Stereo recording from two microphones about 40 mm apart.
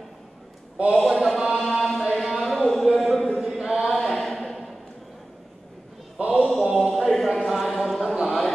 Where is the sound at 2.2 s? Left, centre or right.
Centre.